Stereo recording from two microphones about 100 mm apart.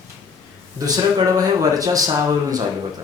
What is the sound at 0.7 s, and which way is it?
Speech, 35° right (ahead or behind).